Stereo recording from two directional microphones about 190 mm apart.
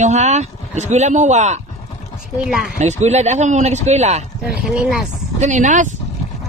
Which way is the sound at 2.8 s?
35° right (ahead or behind).